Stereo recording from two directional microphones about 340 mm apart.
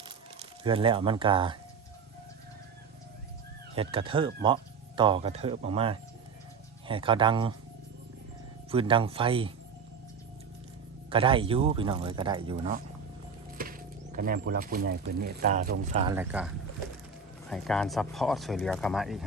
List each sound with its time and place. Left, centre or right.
0.3 s speech: centre
3.8 s speech: centre
8.7 s speech: centre
11.1 s speech: centre
16.1 s speech: centre
17.5 s speech: centre